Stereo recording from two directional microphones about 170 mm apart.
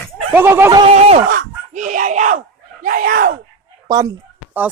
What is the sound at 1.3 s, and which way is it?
Speech, 50° right (ahead or behind).